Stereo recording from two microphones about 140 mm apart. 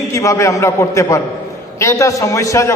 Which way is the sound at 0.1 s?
20° left (ahead or behind).